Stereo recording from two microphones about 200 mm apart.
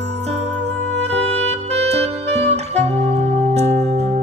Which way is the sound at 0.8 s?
30° right (ahead or behind).